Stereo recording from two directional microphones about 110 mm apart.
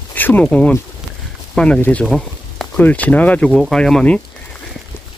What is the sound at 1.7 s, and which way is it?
Speech, 15° left (ahead or behind).